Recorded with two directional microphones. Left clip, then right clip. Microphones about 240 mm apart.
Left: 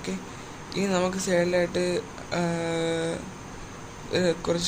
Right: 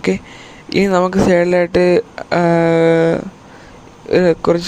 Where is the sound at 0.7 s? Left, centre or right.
Right.